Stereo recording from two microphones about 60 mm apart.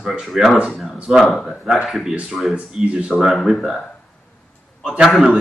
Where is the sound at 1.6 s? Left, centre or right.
Centre.